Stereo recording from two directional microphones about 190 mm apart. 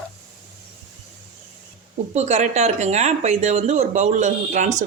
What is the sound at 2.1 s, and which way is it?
Speech, 35° right (ahead or behind).